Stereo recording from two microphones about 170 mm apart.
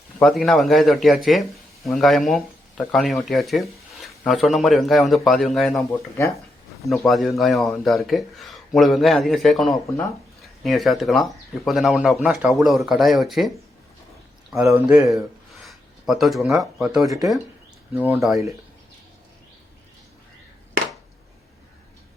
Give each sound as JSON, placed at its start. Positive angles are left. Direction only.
{"t": 0.2, "sound": "a man's voice", "side_deg": 0}
{"t": 6.8, "sound": "a man's voice", "side_deg": 0}
{"t": 14.5, "sound": "a man's voice", "side_deg": 0}
{"t": 15.6, "sound": "a sound", "side_deg": 0}
{"t": 16.7, "sound": "a man's voice", "side_deg": 0}
{"t": 18.2, "sound": "a man's voice", "side_deg": 0}